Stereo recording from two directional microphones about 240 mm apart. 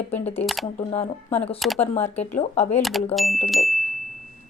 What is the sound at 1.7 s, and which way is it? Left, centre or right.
Speech, left.